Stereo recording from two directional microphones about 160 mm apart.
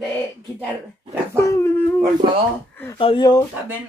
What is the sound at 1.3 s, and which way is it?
Dog, 20° left (ahead or behind).